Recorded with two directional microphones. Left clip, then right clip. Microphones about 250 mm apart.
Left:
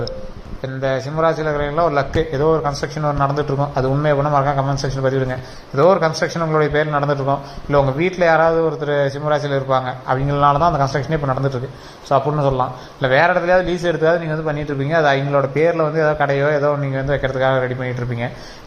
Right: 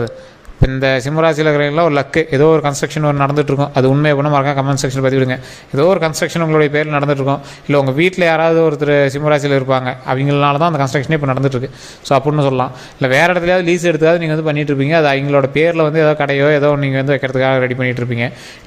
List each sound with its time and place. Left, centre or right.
0.8 s a man's voice: right
13.7 s a man's voice: right